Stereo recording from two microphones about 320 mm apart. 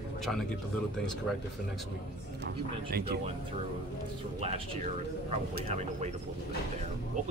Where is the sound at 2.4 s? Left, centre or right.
Right.